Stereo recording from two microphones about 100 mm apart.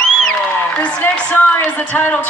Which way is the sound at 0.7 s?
15° left (ahead or behind).